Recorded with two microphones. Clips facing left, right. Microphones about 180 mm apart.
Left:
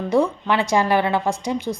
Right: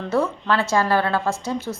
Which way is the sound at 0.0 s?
15° left (ahead or behind).